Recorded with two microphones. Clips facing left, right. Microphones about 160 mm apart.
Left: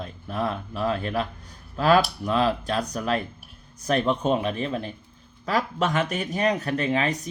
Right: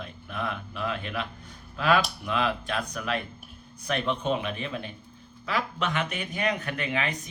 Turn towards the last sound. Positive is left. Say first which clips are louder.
# left 6 dB
turn(degrees=40)  # may be behind; listen again after turning